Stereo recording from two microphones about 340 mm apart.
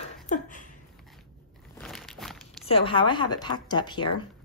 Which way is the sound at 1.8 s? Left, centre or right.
Centre.